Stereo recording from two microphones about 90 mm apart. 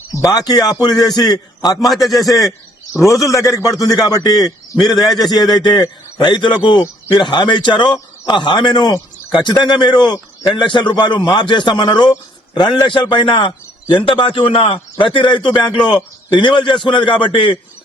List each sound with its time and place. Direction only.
0.1 s a man's voice: 40° left (ahead or behind)
1.9 s a man's voice: centre (ahead or behind)
2.1 s a man's voice: 40° left (ahead or behind); by 17.6 s 65° left (ahead or behind)